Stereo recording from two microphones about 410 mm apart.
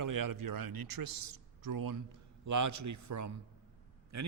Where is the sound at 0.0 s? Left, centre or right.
Right.